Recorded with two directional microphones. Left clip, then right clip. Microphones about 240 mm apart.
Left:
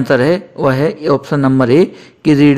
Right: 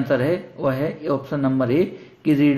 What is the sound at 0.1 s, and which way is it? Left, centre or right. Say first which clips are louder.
A man's voice: left 9 dB; left.